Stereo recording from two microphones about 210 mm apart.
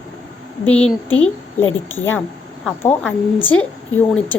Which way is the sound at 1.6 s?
70° left (ahead or behind).